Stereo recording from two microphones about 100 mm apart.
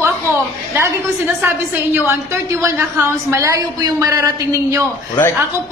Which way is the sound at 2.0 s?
25° right (ahead or behind).